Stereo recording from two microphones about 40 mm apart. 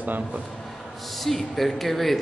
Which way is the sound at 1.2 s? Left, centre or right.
Centre.